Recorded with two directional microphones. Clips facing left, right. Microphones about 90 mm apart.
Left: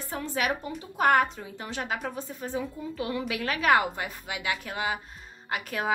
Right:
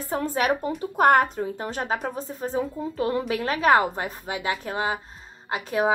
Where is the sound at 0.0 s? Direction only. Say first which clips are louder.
Right 5 dB; 40° right (ahead or behind).